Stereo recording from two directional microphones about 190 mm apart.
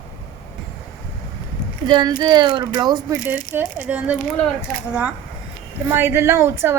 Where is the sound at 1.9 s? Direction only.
25° right (ahead or behind).